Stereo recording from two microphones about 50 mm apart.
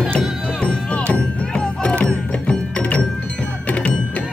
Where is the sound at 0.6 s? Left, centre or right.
Left.